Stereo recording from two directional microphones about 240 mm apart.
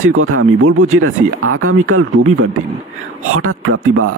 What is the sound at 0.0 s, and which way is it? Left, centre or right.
Speech, right.